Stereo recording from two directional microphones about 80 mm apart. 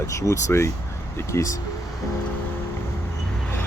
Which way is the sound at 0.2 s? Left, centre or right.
Left.